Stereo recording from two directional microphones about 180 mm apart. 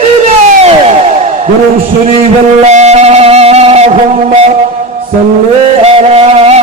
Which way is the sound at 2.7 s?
40° right (ahead or behind).